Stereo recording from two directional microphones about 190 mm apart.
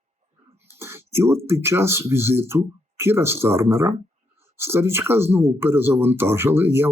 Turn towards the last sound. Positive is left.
turn(degrees=-10)  # may be behind; listen again after turning